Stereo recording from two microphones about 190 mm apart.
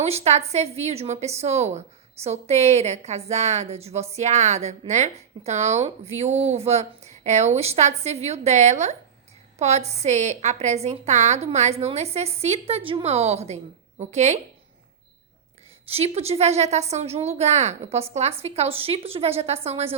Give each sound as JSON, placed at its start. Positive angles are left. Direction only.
{"t": 0.0, "sound": "speech", "side_deg": -35}
{"t": 15.9, "sound": "speech", "side_deg": -30}